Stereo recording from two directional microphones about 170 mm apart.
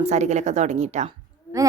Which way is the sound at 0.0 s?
40° right (ahead or behind).